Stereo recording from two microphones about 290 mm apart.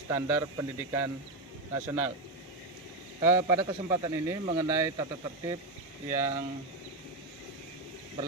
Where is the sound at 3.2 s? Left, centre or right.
Centre.